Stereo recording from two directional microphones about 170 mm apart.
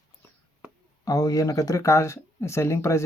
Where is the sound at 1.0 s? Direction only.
20° left (ahead or behind).